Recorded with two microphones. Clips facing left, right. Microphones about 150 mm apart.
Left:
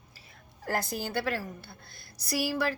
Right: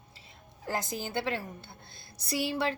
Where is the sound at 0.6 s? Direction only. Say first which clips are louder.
Left 2 dB; 20° right (ahead or behind).